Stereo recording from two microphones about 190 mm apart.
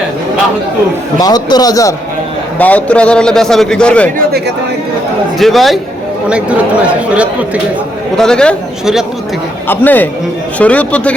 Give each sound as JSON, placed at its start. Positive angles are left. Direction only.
{"t": 1.2, "sound": "a man's voice", "side_deg": 20}
{"t": 5.4, "sound": "a man's voice", "side_deg": 0}